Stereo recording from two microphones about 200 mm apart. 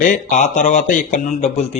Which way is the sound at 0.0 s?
40° left (ahead or behind).